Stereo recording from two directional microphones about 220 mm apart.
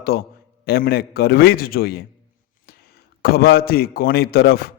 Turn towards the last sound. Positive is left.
turn(degrees=45)  # may be behind; listen again after turning